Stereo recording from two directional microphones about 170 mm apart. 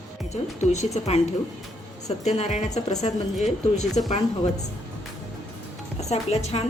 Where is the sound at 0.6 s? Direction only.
40° left (ahead or behind).